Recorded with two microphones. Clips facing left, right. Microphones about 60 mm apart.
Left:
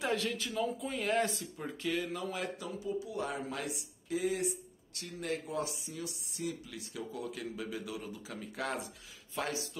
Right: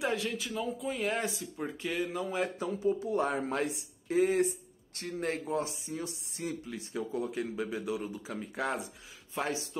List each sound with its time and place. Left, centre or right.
0.0 s speech: centre
1.6 s speech: centre
2.9 s speech: right